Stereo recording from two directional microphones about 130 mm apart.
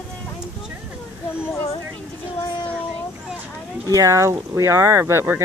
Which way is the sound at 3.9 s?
25° right (ahead or behind).